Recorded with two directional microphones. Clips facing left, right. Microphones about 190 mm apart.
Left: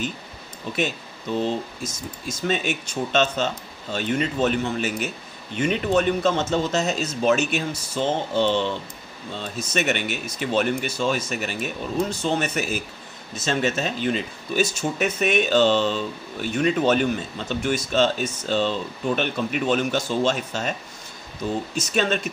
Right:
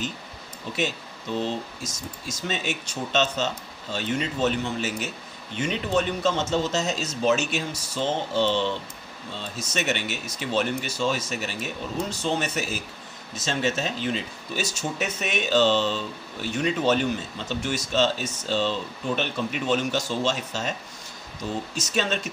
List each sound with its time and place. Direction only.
1.8 s speech: 55° left (ahead or behind)
21.7 s speech: 55° left (ahead or behind)